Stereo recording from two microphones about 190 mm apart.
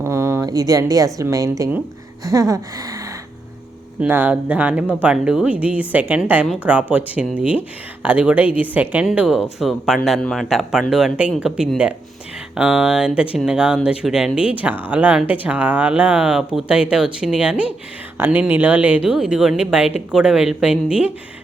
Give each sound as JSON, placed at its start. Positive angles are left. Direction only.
{"t": 0.0, "sound": "a woman's voice", "side_deg": -15}
{"t": 4.0, "sound": "a woman's voice", "side_deg": -10}